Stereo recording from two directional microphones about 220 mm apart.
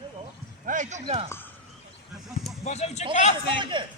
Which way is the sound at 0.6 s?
35° right (ahead or behind).